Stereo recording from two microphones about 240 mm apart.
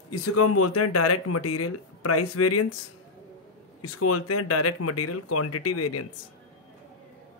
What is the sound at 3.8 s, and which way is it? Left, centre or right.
Speech, left.